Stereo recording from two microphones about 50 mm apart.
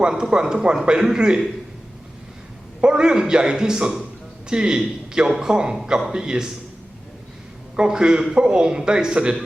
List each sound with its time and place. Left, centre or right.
0.0 s a man's voice: centre
2.8 s a man's voice: centre
7.8 s a man's voice: centre